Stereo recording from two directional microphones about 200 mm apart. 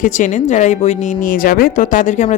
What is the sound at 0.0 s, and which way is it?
Speech, 40° left (ahead or behind).